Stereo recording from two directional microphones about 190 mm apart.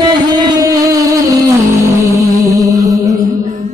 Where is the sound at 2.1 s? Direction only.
20° right (ahead or behind).